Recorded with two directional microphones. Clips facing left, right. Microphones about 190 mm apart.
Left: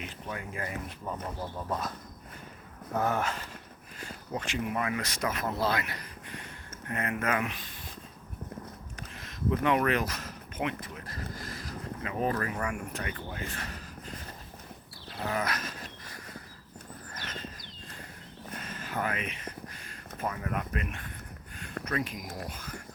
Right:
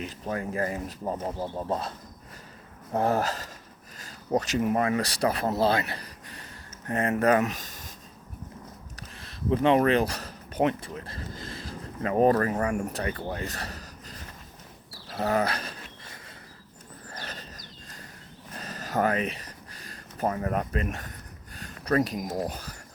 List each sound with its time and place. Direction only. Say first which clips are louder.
0.0 s speech: right 7 dB; 35° right (ahead or behind)
2.9 s speech: right 4 dB; 30° right (ahead or behind)
9.0 s speech: left 1 dB; 30° right (ahead or behind)
12.0 s speech: right 10 dB; 45° right (ahead or behind)
17.2 s a sound: right 1 dB; 35° right (ahead or behind)
21.8 s speech: right 9 dB; 40° right (ahead or behind)